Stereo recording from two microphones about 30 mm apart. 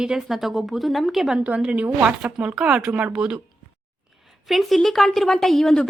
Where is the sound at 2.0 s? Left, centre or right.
Right.